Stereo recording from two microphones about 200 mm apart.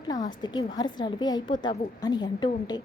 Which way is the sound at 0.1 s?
20° left (ahead or behind).